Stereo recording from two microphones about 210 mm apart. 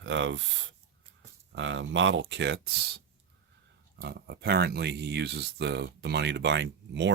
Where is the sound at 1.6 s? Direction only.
60° right (ahead or behind).